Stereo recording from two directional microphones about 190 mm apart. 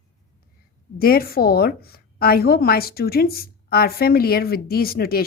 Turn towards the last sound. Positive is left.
turn(degrees=50)  # may be behind; listen again after turning